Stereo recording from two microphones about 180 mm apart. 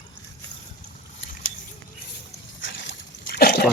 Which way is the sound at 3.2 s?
60° left (ahead or behind).